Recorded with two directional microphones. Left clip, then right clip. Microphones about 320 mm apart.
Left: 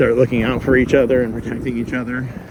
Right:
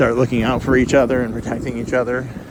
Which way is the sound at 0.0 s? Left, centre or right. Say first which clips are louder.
Left 2 dB; centre.